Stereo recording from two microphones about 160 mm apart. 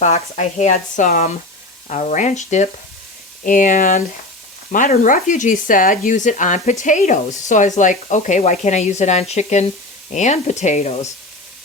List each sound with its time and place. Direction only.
0.0 s speech: 45° left (ahead or behind)